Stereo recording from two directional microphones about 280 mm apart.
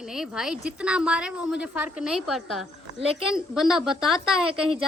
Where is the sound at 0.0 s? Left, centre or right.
Centre.